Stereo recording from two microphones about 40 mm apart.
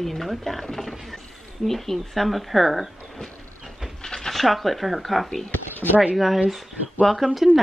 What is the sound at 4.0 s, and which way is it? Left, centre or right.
A woman's voice, centre.